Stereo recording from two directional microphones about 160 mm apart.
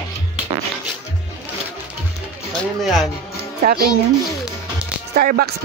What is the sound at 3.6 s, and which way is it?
Speech, 75° right (ahead or behind).